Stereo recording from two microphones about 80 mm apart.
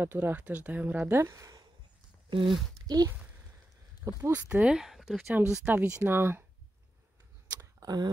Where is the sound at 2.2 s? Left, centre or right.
Right.